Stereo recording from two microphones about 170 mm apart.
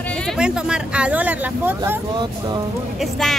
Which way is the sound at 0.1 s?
5° left (ahead or behind).